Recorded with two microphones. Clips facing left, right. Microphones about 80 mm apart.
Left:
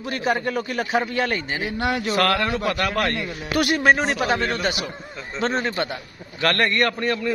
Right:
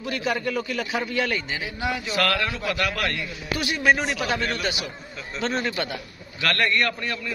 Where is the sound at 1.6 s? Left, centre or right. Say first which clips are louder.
Left 4 dB; left.